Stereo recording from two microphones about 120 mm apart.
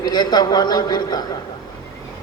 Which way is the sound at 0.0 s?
35° left (ahead or behind).